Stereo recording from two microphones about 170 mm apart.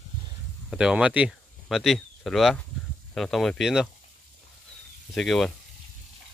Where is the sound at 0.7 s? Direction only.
5° right (ahead or behind).